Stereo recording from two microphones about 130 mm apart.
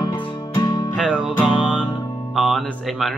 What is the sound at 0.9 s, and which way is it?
Music, 5° right (ahead or behind).